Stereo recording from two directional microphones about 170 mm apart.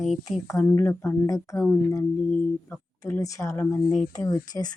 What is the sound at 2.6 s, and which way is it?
Speech, 15° left (ahead or behind).